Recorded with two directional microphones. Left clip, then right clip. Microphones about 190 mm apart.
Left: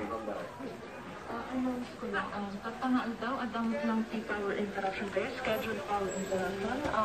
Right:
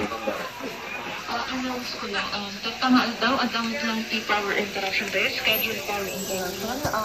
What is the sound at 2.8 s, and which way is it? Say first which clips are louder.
A woman's voice: right 12 dB; 40° left (ahead or behind).